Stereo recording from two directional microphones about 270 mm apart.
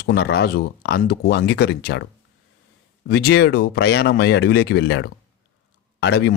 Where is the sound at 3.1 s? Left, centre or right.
Left.